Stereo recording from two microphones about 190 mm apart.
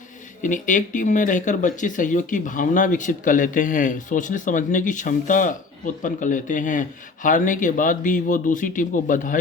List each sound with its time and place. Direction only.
0.4 s speech: 40° left (ahead or behind)